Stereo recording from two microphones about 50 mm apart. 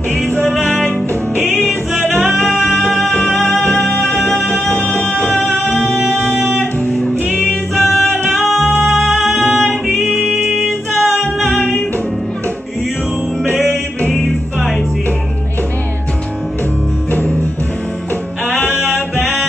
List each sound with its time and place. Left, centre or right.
0.4 s music: centre
3.1 s music: left
4.7 s music: left
6.9 s music: left
7.4 s music: centre
17.1 s music: left